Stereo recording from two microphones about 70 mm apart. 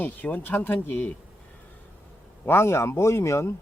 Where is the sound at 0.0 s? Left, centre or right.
Left.